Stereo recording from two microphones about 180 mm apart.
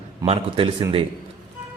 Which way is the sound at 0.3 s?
30° right (ahead or behind).